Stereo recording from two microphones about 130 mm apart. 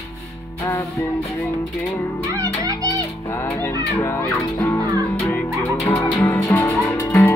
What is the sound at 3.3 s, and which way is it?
Music, 15° left (ahead or behind).